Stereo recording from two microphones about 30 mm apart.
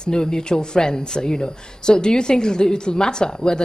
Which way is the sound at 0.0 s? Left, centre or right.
Left.